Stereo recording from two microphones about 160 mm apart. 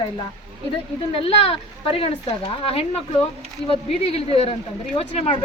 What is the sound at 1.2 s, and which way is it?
Speech, 40° left (ahead or behind).